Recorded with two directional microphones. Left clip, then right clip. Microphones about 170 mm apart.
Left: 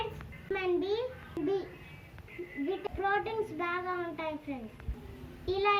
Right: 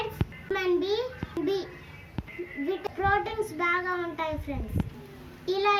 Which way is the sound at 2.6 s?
5° right (ahead or behind).